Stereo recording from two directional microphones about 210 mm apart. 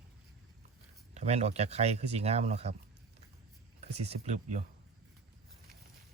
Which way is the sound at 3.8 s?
30° right (ahead or behind).